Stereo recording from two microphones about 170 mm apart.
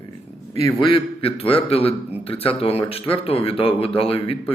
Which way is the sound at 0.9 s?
30° left (ahead or behind).